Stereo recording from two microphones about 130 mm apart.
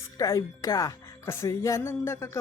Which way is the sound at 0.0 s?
25° left (ahead or behind).